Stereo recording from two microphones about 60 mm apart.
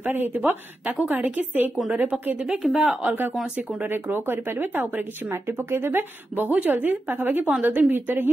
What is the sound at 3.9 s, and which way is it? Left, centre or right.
Speech, right.